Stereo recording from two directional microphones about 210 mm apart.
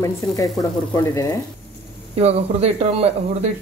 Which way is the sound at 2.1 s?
30° right (ahead or behind).